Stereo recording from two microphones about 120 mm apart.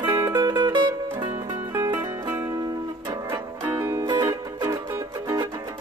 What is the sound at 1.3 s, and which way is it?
Music, 20° right (ahead or behind).